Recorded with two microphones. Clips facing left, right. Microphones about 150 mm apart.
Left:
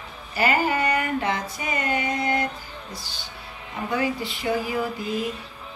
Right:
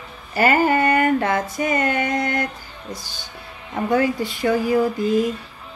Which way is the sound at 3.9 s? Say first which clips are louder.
Right 6 dB; 45° right (ahead or behind).